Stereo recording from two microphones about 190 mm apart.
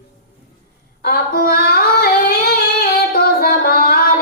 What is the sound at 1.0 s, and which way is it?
Female singing, 55° left (ahead or behind).